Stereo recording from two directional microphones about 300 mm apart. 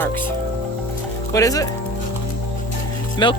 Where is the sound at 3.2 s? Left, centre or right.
Centre.